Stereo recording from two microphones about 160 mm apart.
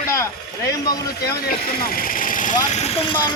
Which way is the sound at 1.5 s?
65° left (ahead or behind).